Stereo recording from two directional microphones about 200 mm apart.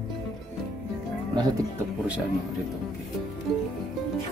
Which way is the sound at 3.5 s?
Centre (ahead or behind).